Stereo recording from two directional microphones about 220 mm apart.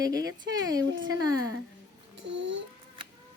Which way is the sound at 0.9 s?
60° right (ahead or behind).